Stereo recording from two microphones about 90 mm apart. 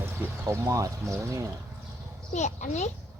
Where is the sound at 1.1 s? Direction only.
35° right (ahead or behind).